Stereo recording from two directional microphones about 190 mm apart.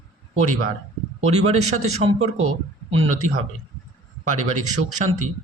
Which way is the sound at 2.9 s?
35° right (ahead or behind).